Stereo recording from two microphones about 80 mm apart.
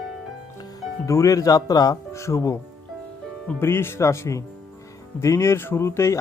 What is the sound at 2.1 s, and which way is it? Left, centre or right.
Speech, left.